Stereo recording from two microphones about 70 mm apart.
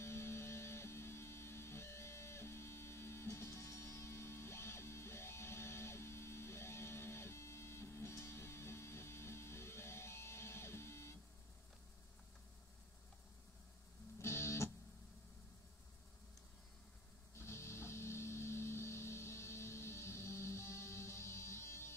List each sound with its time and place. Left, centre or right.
0.0 s music: left
14.2 s music: left
17.4 s music: left